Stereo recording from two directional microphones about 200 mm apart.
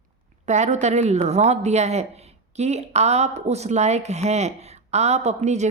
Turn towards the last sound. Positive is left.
turn(degrees=-35)  # may be behind; listen again after turning